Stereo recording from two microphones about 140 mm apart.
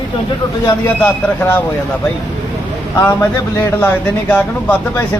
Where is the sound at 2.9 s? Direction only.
20° left (ahead or behind).